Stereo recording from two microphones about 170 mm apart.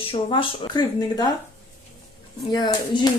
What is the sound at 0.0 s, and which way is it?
Speech, 30° left (ahead or behind).